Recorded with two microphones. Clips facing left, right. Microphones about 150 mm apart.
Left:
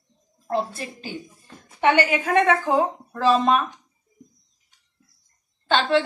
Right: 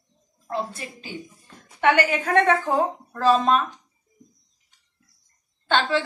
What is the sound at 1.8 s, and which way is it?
Speech, 30° left (ahead or behind).